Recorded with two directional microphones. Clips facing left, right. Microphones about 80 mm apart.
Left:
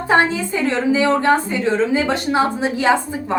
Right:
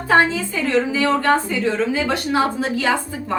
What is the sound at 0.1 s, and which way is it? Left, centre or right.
Speech, left.